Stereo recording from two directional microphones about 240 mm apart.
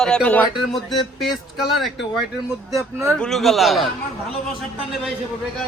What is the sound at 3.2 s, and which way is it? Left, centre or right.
Speech, centre.